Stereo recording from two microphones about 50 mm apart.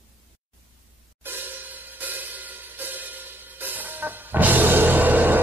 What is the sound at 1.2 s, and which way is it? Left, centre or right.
Music, right.